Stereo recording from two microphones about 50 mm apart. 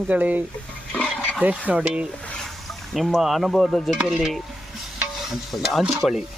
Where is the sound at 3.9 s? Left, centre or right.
Centre.